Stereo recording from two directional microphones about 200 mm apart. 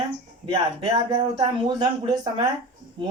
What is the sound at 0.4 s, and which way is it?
Speech, 20° right (ahead or behind).